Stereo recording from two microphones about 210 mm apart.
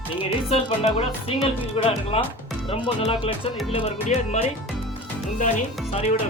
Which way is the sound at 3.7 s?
30° left (ahead or behind).